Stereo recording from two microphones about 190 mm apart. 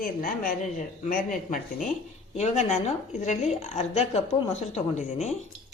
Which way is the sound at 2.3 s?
35° left (ahead or behind).